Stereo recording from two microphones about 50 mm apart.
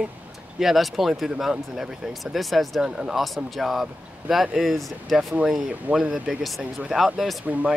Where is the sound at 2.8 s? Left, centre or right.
Centre.